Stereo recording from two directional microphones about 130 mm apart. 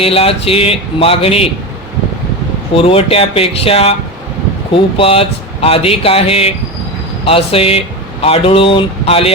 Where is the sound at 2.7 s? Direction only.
45° left (ahead or behind).